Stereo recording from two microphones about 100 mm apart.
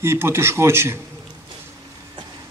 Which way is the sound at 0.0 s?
25° right (ahead or behind).